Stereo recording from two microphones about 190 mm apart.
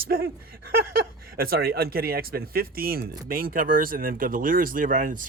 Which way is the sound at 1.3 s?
50° right (ahead or behind).